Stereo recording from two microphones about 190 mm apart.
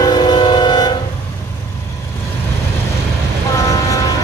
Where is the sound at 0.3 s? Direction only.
20° left (ahead or behind).